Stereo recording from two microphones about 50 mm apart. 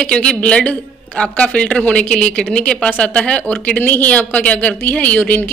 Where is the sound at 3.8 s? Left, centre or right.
Left.